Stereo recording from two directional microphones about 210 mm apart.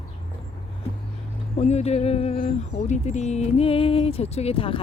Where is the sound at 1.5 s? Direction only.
30° left (ahead or behind).